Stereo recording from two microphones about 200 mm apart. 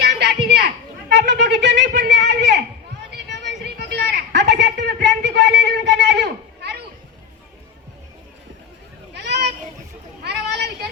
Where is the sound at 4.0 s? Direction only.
55° right (ahead or behind).